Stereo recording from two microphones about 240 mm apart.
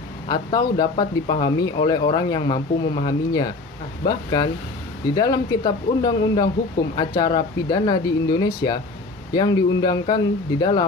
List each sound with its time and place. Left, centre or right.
0.3 s speech: centre